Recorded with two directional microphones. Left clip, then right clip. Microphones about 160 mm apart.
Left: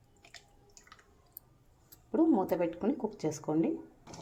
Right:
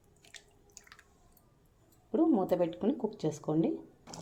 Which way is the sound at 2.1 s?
Centre (ahead or behind).